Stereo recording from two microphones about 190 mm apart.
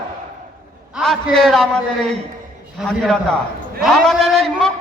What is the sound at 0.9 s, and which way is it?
A man's voice, centre (ahead or behind).